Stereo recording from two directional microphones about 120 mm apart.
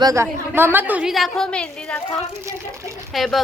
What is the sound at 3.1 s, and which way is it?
Speech, centre (ahead or behind).